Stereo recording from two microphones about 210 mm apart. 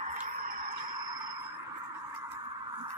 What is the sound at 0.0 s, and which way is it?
Tick-tock, 35° right (ahead or behind).